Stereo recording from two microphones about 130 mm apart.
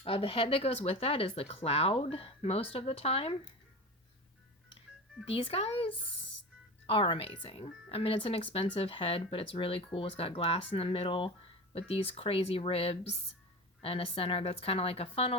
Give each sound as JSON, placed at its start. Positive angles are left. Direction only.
{"t": 0.0, "sound": "speech", "side_deg": 45}
{"t": 5.3, "sound": "speech", "side_deg": 45}